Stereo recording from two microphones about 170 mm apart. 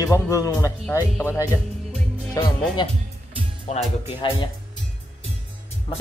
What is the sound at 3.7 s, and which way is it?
Speech, 40° left (ahead or behind).